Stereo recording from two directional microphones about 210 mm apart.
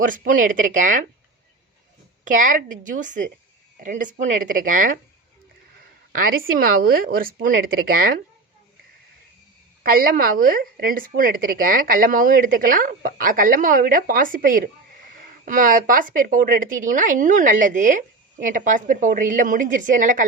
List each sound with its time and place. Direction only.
0.0 s speech: 40° right (ahead or behind)
2.2 s speech: 40° right (ahead or behind)
6.6 s speech: 45° right (ahead or behind)
9.8 s speech: 45° right (ahead or behind)